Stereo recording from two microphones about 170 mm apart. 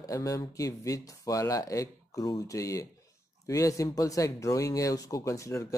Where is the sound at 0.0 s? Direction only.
20° left (ahead or behind).